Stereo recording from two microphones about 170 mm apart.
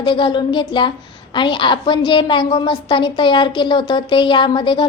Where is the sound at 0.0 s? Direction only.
25° left (ahead or behind).